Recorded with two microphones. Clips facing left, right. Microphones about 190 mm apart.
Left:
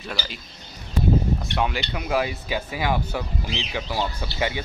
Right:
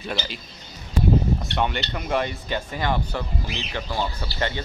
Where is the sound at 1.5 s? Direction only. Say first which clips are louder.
Even; 5° left (ahead or behind).